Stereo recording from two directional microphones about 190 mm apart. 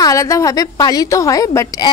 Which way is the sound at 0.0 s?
15° left (ahead or behind).